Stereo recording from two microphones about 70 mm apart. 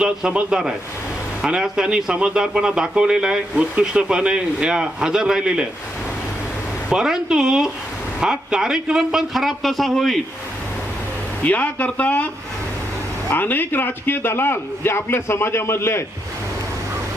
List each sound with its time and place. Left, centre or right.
0.0 s a man's voice: centre
6.9 s a man's voice: centre
11.4 s speech: left
13.3 s a man's voice: left